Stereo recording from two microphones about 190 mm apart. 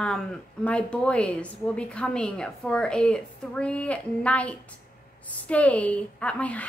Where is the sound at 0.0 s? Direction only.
5° left (ahead or behind).